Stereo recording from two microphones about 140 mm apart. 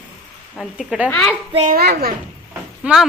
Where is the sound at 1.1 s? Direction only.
5° left (ahead or behind).